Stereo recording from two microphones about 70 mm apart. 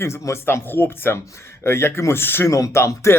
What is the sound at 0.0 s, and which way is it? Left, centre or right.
Speech, left.